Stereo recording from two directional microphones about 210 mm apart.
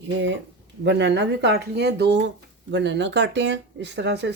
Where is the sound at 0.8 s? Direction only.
55° right (ahead or behind).